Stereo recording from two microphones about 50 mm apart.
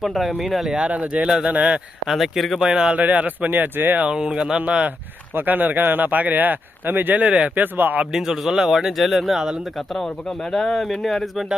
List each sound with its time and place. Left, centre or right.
0.0 s a man's voice: centre
0.8 s speech: right
2.1 s speech: centre
2.6 s a man's voice: centre
2.9 s speech: right
4.0 s a man's voice: centre
5.3 s speech: right
7.2 s speech: right
8.1 s a man's voice: centre
9.7 s speech: centre